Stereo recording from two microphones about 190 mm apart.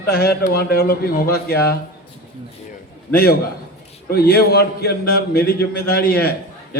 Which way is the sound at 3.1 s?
50° left (ahead or behind).